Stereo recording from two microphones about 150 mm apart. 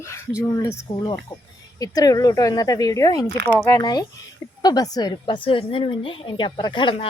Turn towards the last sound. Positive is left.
turn(degrees=35)  # may be behind; listen again after turning